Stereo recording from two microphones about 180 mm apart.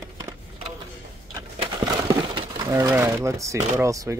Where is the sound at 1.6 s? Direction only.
20° right (ahead or behind).